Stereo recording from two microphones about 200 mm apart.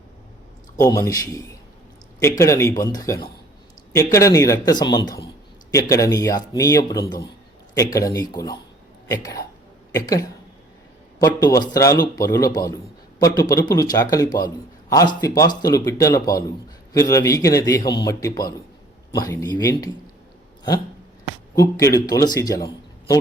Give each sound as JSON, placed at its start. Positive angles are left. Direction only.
{"t": 0.8, "sound": "a man's voice", "side_deg": 15}
{"t": 21.5, "sound": "speech", "side_deg": 15}